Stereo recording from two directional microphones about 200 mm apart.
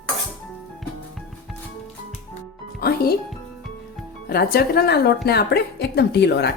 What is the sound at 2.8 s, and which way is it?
Music, 50° left (ahead or behind).